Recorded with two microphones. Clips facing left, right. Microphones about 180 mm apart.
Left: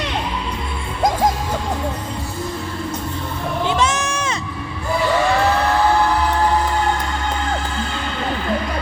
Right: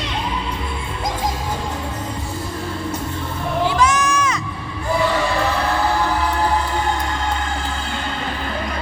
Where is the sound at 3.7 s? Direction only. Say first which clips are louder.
Right 1 dB; 25° left (ahead or behind).